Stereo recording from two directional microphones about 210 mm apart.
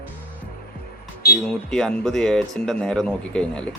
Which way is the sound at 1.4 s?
5° left (ahead or behind).